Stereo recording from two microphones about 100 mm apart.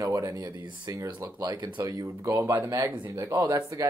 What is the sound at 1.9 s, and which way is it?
Speech, 30° right (ahead or behind).